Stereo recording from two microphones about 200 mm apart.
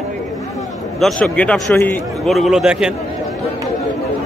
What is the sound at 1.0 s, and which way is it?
Speech, 5° left (ahead or behind).